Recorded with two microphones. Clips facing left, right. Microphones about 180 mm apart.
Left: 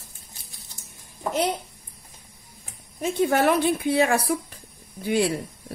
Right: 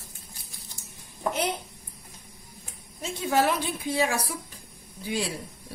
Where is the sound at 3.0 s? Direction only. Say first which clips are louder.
Left 4 dB; 60° left (ahead or behind).